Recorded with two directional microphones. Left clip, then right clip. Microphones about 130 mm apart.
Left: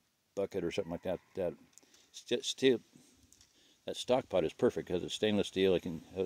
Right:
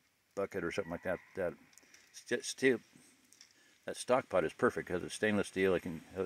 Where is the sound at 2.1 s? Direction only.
25° left (ahead or behind).